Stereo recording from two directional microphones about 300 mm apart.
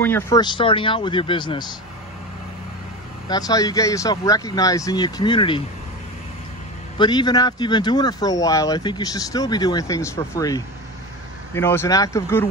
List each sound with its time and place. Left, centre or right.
0.0 s speech: centre
3.3 s speech: centre
7.0 s speech: centre